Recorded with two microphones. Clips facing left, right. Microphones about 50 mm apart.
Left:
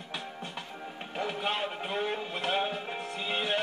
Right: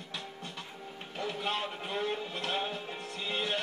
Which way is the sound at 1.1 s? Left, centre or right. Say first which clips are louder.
Left 2 dB; left.